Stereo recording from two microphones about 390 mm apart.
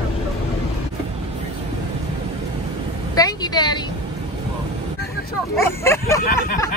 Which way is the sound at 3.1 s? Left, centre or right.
Centre.